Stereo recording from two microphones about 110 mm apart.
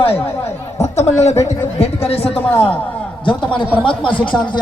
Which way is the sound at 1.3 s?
30° left (ahead or behind).